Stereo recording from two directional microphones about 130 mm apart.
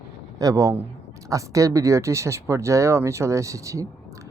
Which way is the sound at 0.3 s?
25° right (ahead or behind).